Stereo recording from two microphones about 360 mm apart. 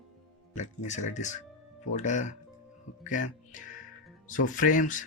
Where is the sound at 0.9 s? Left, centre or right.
Centre.